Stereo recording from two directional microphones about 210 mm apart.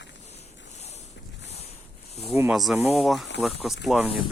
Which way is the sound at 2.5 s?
Centre (ahead or behind).